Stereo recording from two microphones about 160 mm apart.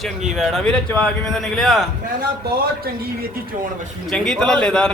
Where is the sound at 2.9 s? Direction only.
70° right (ahead or behind).